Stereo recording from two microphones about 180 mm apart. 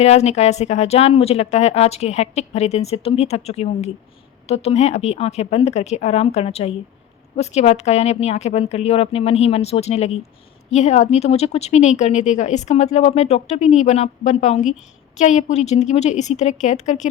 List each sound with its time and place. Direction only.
0.0 s a woman's voice: 35° left (ahead or behind)